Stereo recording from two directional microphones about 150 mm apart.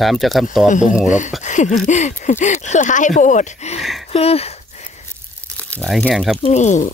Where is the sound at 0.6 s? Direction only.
55° left (ahead or behind).